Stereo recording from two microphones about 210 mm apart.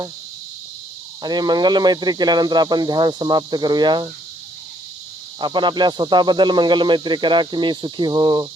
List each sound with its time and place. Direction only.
1.2 s speech: 20° right (ahead or behind)
5.4 s speech: 20° right (ahead or behind)